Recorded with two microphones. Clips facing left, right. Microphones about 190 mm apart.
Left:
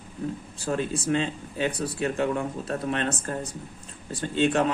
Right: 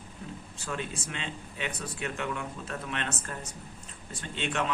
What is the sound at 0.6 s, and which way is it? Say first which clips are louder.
Speech: left 9 dB; 35° left (ahead or behind).